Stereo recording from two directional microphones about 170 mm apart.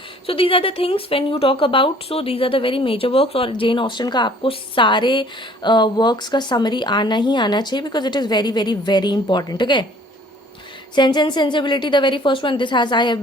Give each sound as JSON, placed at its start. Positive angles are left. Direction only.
{"t": 0.3, "sound": "speech", "side_deg": 30}
{"t": 10.9, "sound": "speech", "side_deg": 25}